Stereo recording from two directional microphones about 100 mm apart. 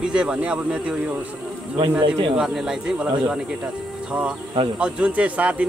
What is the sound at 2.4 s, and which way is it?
Speech, 10° right (ahead or behind).